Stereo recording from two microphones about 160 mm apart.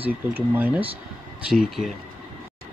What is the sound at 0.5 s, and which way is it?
Speech, 10° right (ahead or behind).